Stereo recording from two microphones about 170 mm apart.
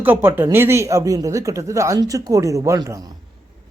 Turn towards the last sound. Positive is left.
turn(degrees=-20)  # may be behind; listen again after turning